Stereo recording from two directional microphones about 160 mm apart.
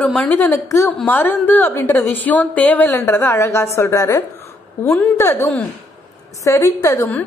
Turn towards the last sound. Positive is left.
turn(degrees=15)  # may be behind; listen again after turning